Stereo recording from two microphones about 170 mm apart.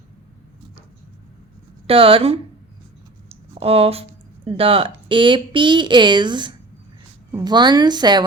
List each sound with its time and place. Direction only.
1.9 s speech: 35° right (ahead or behind)
3.2 s a sound: 35° right (ahead or behind)
4.4 s speech: 35° right (ahead or behind)